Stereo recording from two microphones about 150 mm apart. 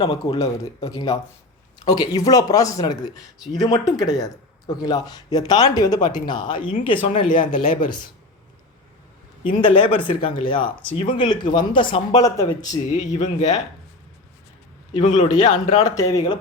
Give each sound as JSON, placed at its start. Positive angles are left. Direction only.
{"t": 0.0, "sound": "speech", "side_deg": 35}
{"t": 0.6, "sound": "speech", "side_deg": 25}
{"t": 7.3, "sound": "speech", "side_deg": 65}
{"t": 9.6, "sound": "speech", "side_deg": 35}
{"t": 12.9, "sound": "a man's voice", "side_deg": 55}
{"t": 15.0, "sound": "a man's voice", "side_deg": 50}
{"t": 15.7, "sound": "speech", "side_deg": 25}